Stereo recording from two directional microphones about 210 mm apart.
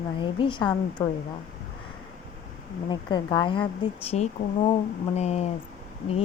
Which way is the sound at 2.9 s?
20° left (ahead or behind).